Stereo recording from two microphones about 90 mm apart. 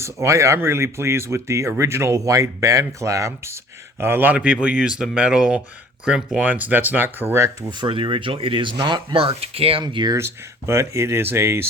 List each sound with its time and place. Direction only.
0.0 s speech: 35° right (ahead or behind)
7.7 s speech: 65° right (ahead or behind); by 9.8 s 90° right
9.8 s speech: 55° right (ahead or behind)
10.2 s speech: 30° right (ahead or behind)